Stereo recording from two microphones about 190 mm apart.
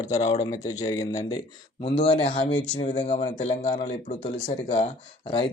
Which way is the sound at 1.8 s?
30° left (ahead or behind).